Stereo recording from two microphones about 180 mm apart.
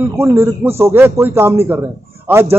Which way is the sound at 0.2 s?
15° right (ahead or behind).